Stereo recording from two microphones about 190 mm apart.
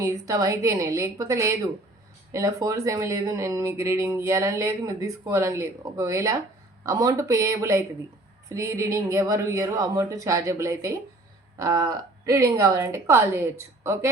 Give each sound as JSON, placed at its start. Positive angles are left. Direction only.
{"t": 0.0, "sound": "speech", "side_deg": -15}